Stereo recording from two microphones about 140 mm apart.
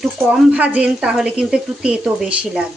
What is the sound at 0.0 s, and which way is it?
Speech, 10° right (ahead or behind).